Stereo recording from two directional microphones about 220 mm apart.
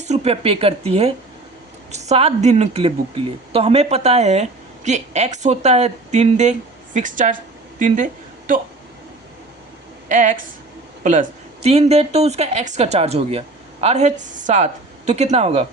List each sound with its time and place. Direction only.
0.1 s a woman's voice: 30° right (ahead or behind)
10.1 s a woman's voice: 35° right (ahead or behind)